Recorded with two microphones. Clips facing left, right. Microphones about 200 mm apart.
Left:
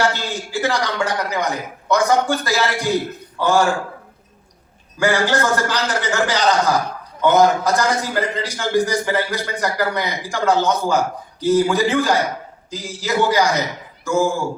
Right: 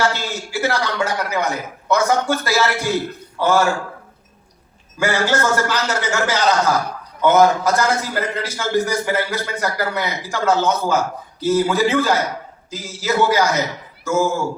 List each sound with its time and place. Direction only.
0.0 s a man's voice: 15° left (ahead or behind)
5.0 s a man's voice: 15° left (ahead or behind)